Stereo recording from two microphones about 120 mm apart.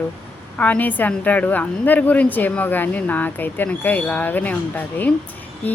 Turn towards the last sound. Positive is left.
turn(degrees=15)  # may be behind; listen again after turning